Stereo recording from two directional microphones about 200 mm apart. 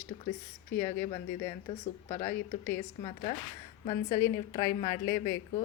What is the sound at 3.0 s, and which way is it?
Speech, 30° left (ahead or behind).